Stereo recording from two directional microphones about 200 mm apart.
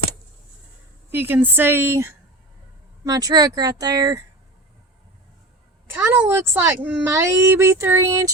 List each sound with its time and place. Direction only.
1.1 s a woman's voice: 10° right (ahead or behind)
5.9 s a woman's voice: 10° right (ahead or behind)